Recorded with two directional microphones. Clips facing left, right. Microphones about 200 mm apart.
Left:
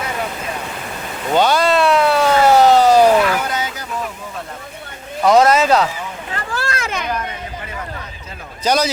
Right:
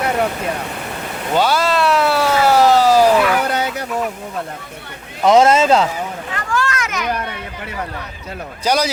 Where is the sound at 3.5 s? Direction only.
65° right (ahead or behind).